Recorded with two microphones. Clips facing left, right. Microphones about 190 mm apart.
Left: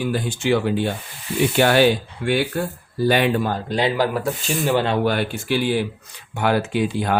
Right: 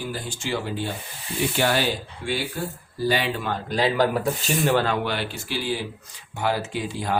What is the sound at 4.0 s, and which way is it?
Speech, 5° left (ahead or behind).